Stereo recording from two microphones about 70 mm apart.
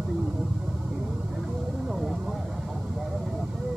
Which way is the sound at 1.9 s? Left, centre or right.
Centre.